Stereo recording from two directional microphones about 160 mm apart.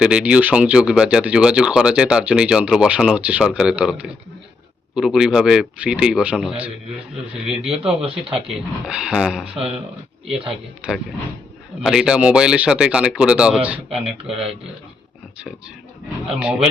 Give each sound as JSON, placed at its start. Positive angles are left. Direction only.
{"t": 0.0, "sound": "speech", "side_deg": -5}
{"t": 10.5, "sound": "speech", "side_deg": 0}
{"t": 14.3, "sound": "speech", "side_deg": -35}
{"t": 16.2, "sound": "speech", "side_deg": -5}